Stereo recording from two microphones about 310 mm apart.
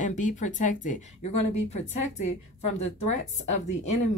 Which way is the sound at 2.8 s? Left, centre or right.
Left.